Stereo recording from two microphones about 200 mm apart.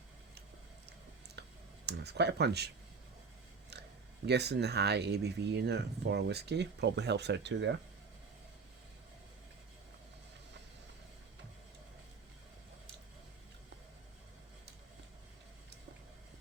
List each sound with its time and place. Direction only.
1.4 s clicking: 55° right (ahead or behind)
1.9 s speech: 55° right (ahead or behind)
4.3 s speech: 55° right (ahead or behind)